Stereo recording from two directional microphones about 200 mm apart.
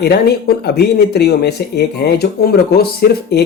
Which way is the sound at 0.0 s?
50° left (ahead or behind).